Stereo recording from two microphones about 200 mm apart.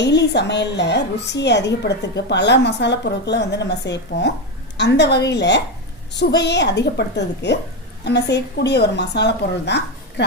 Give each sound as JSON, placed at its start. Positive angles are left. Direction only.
{"t": 0.0, "sound": "a woman's voice", "side_deg": 60}